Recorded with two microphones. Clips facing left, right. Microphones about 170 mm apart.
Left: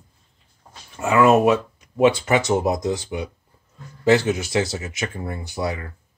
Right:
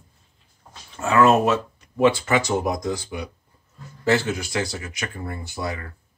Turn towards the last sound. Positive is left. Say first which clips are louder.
# left 3 dB
turn(degrees=20)  # may be behind; listen again after turning